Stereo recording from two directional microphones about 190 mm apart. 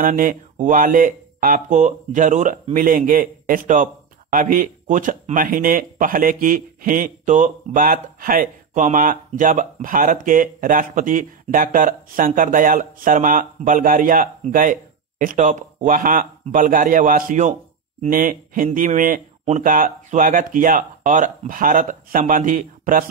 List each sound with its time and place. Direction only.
0.0 s speech: 45° right (ahead or behind)